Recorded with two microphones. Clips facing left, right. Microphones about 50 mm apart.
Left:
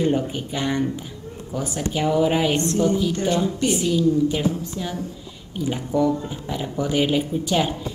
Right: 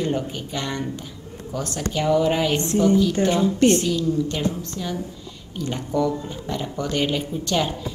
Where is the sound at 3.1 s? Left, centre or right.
Right.